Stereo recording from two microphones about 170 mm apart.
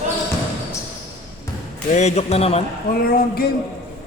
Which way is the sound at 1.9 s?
40° left (ahead or behind).